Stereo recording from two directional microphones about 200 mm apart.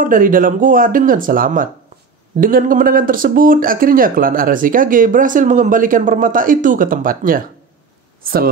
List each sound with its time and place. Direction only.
0.0 s speech: 45° right (ahead or behind)